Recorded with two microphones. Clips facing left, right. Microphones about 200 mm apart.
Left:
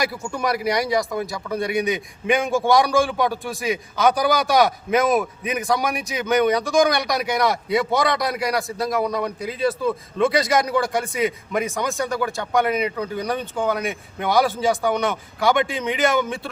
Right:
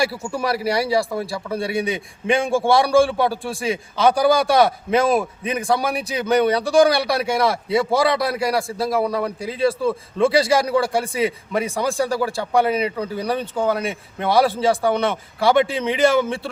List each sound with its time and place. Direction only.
0.2 s speech: 5° right (ahead or behind)
0.4 s a man's voice: 30° right (ahead or behind)